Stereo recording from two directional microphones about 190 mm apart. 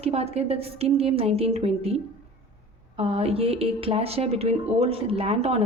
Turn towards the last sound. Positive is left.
turn(degrees=-35)  # may be behind; listen again after turning